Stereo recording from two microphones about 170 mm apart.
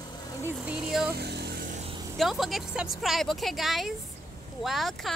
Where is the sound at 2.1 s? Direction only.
Centre (ahead or behind).